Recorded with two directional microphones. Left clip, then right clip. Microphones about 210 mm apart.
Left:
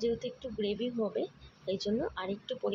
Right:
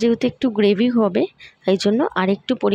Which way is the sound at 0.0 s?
50° right (ahead or behind).